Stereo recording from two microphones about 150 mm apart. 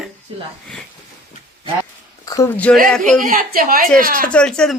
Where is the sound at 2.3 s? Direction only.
20° left (ahead or behind).